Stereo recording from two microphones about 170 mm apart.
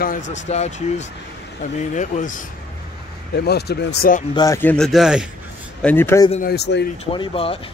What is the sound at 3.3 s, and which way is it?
Speech, 70° left (ahead or behind).